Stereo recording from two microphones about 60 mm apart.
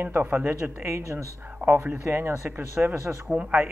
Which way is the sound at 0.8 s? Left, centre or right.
Right.